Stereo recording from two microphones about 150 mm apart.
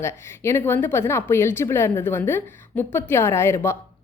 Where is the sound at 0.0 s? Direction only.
15° left (ahead or behind).